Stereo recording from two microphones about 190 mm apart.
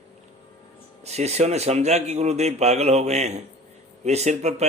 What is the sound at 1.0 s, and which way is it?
A man's voice, 35° right (ahead or behind).